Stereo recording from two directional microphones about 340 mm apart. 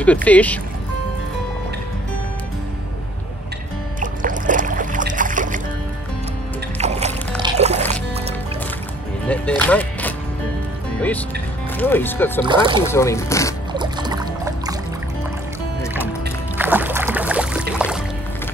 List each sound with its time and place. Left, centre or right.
0.0 s speech: centre
4.0 s music: right
6.8 s music: centre
9.3 s music: centre
11.7 s speech: centre
12.4 s speech: centre
12.9 s speech: centre
13.7 s music: centre
16.5 s music: centre